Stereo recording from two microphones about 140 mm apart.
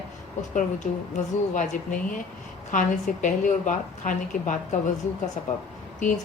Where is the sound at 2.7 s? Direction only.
65° left (ahead or behind).